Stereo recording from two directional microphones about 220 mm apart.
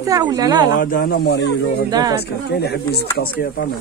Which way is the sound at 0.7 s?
40° left (ahead or behind).